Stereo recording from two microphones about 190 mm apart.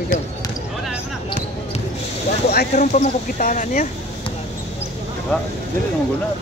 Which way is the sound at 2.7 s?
35° left (ahead or behind).